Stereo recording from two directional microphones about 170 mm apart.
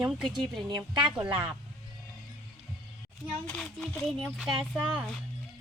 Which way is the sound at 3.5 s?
Centre (ahead or behind).